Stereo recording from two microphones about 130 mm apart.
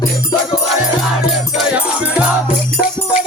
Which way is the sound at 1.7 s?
10° right (ahead or behind).